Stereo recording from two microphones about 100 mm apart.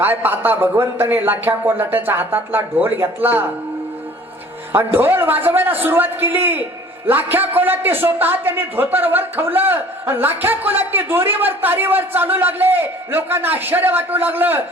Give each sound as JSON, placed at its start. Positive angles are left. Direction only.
{"t": 0.0, "sound": "a man's voice", "side_deg": -20}
{"t": 4.7, "sound": "a man's voice", "side_deg": -20}